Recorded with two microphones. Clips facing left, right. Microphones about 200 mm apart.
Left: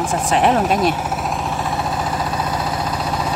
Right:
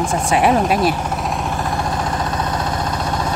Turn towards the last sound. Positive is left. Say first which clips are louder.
# even
turn(degrees=5)  # may be behind; listen again after turning